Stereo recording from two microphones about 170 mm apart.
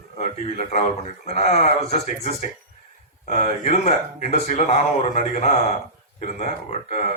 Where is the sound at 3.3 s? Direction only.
40° left (ahead or behind).